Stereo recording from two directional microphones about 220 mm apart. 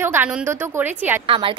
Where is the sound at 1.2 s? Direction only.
25° right (ahead or behind).